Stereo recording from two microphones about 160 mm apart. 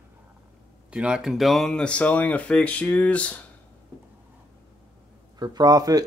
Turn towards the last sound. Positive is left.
turn(degrees=-25)  # may be behind; listen again after turning